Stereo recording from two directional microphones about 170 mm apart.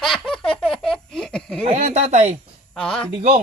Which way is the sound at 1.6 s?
45° right (ahead or behind).